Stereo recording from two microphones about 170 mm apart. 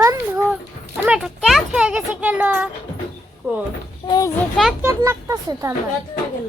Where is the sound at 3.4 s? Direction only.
10° right (ahead or behind).